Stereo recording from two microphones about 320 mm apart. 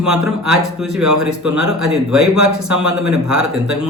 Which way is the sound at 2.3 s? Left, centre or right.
Right.